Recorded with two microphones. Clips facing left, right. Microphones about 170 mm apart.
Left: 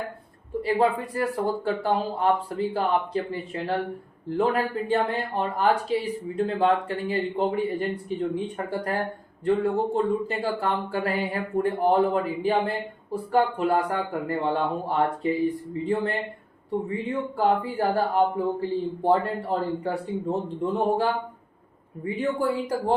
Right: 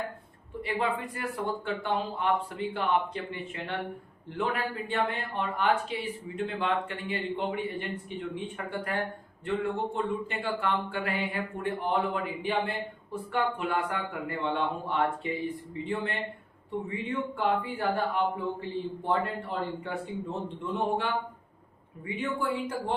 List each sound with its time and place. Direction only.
0.6 s speech: 35° left (ahead or behind)